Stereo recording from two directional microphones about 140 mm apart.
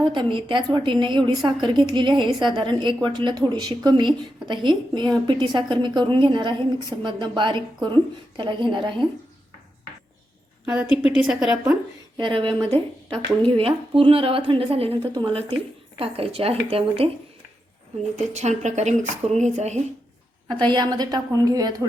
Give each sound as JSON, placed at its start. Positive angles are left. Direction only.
{"t": 0.0, "sound": "a woman's voice", "side_deg": -35}
{"t": 10.8, "sound": "a woman's voice", "side_deg": 45}
{"t": 11.1, "sound": "a woman's voice", "side_deg": -5}
{"t": 12.1, "sound": "speech", "side_deg": -40}
{"t": 12.7, "sound": "speech", "side_deg": 5}
{"t": 13.4, "sound": "a woman's voice", "side_deg": -40}
{"t": 18.3, "sound": "a woman's voice", "side_deg": -55}
{"t": 20.7, "sound": "a woman's voice", "side_deg": -30}